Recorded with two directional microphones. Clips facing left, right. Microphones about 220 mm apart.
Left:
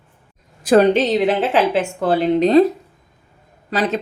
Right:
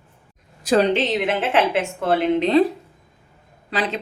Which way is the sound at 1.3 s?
35° left (ahead or behind).